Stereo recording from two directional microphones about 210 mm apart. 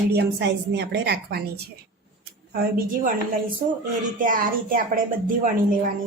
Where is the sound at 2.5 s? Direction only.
45° right (ahead or behind).